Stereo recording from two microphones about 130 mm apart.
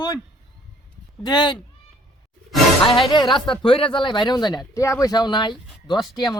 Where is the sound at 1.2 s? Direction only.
35° left (ahead or behind).